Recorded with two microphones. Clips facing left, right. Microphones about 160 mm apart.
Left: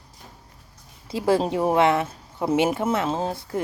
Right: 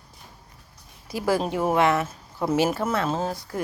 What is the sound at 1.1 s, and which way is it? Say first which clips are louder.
Speech: left 3 dB; 25° left (ahead or behind).